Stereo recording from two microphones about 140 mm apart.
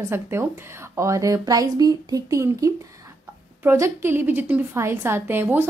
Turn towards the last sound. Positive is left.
turn(degrees=-15)  # may be behind; listen again after turning